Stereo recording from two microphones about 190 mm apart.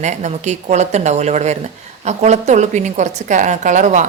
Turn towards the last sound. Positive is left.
turn(degrees=-40)  # may be behind; listen again after turning